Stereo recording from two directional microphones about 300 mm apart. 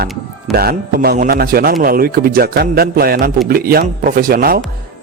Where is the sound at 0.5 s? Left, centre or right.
Right.